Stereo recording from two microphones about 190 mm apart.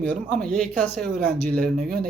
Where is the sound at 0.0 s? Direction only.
5° left (ahead or behind).